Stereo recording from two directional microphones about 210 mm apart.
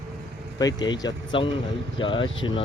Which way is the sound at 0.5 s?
20° left (ahead or behind).